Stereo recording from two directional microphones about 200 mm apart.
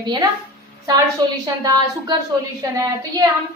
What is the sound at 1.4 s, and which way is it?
Speech, 20° right (ahead or behind).